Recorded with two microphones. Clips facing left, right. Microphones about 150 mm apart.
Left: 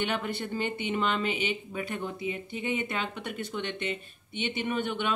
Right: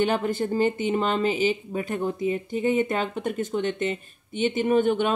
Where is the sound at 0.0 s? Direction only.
40° right (ahead or behind).